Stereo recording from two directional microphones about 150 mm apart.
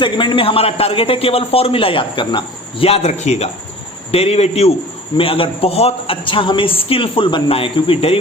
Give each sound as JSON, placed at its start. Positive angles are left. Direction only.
{"t": 0.0, "sound": "a man's voice", "side_deg": 30}